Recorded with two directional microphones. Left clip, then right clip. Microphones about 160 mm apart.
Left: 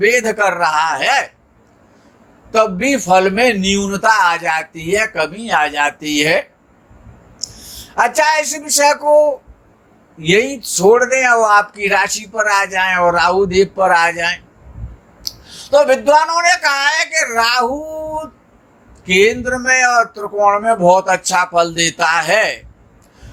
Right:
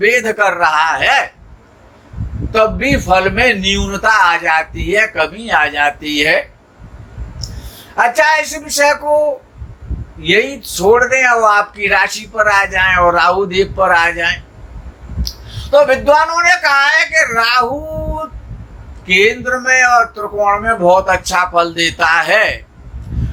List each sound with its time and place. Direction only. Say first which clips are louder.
0.0 s a man's voice: right 1 dB; 40° left (ahead or behind)
2.5 s a man's voice: right 1 dB; 45° left (ahead or behind)